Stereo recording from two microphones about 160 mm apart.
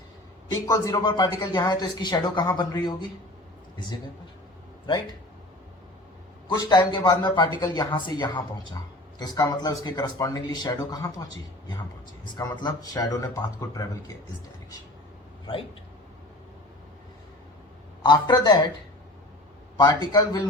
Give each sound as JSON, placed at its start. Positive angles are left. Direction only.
{"t": 0.6, "sound": "speech", "side_deg": 20}
{"t": 6.5, "sound": "speech", "side_deg": 25}
{"t": 18.0, "sound": "speech", "side_deg": 25}
{"t": 19.7, "sound": "speech", "side_deg": 25}